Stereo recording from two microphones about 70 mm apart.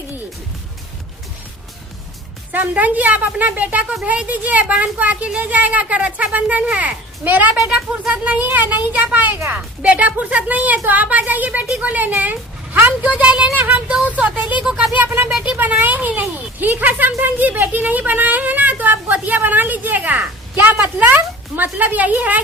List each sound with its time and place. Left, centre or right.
2.5 s speech: right
14.6 s speech: centre
14.9 s speech: right
15.3 s speech: centre
15.5 s speech: right